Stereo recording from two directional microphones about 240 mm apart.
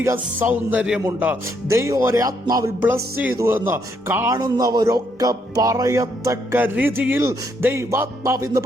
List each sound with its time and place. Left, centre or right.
0.0 s a man's voice: centre